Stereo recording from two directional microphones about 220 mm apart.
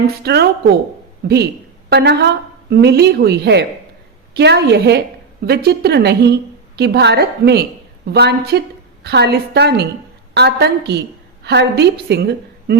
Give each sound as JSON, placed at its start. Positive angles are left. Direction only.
{"t": 0.2, "sound": "a woman's voice", "side_deg": -45}